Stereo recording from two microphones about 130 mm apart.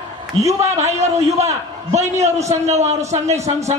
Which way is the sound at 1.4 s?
60° right (ahead or behind).